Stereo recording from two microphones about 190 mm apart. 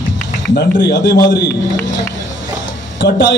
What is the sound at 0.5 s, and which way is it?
Speech, 65° left (ahead or behind).